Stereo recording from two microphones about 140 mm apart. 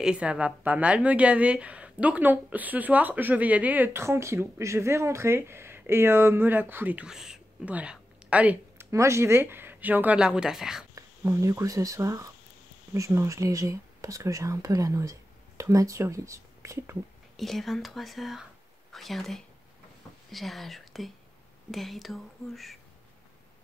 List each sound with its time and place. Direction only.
0.0 s a woman's voice: 5° right (ahead or behind)
8.9 s a woman's voice: 20° right (ahead or behind); by 10.9 s 5° right (ahead or behind)
11.0 s speech: 20° right (ahead or behind)
17.4 s speech: centre (ahead or behind)